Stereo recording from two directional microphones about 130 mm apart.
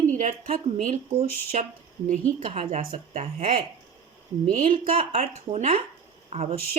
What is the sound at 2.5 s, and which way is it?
Speech, 50° right (ahead or behind).